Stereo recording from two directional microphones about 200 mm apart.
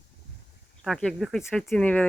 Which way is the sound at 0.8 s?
5° left (ahead or behind).